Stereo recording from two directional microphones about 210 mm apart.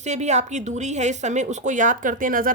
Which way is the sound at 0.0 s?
35° right (ahead or behind).